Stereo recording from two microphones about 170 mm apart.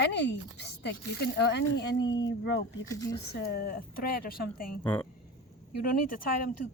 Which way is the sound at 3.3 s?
70° left (ahead or behind).